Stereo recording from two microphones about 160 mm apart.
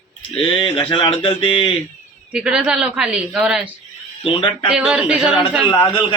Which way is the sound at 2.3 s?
5° right (ahead or behind).